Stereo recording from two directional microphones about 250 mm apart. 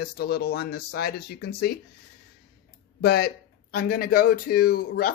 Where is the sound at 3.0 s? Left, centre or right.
Left.